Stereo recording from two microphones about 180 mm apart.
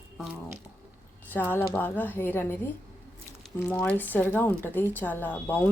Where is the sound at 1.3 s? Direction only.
10° left (ahead or behind).